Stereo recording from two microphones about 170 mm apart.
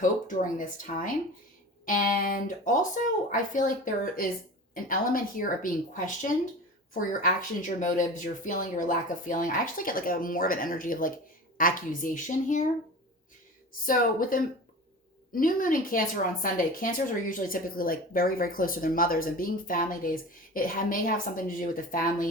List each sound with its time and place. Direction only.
0.0 s speech: 50° left (ahead or behind)
13.8 s a woman's voice: 55° left (ahead or behind)